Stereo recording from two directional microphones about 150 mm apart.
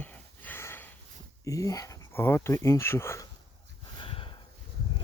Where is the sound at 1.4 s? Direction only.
20° left (ahead or behind).